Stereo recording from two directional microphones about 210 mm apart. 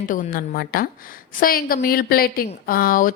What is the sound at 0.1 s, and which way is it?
A woman's voice, 40° left (ahead or behind).